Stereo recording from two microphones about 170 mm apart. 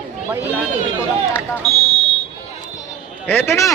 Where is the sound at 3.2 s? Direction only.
15° left (ahead or behind).